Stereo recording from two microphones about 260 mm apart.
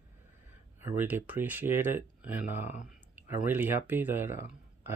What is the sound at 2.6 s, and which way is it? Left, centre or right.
Speech, left.